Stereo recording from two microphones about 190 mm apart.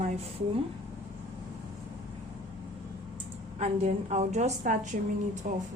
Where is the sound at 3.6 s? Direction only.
35° right (ahead or behind).